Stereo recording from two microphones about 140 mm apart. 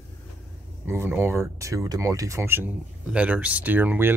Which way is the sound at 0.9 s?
15° right (ahead or behind).